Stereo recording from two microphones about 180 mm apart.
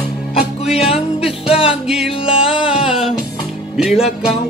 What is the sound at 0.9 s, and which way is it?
Music, 35° left (ahead or behind).